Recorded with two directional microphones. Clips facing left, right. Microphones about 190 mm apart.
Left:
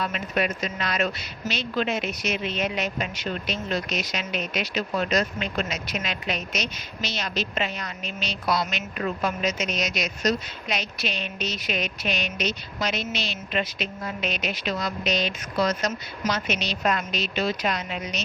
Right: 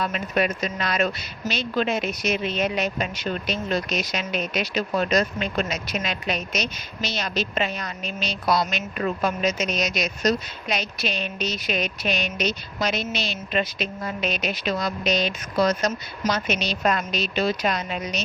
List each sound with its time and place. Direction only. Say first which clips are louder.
0.0 s a woman's voice: right 2 dB; 40° right (ahead or behind)